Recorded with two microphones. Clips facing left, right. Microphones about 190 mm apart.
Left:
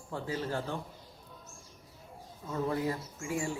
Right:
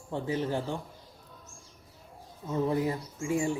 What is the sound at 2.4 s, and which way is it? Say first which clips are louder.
Speech: right 4 dB; 20° right (ahead or behind).